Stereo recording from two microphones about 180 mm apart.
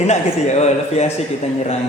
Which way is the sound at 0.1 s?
40° left (ahead or behind).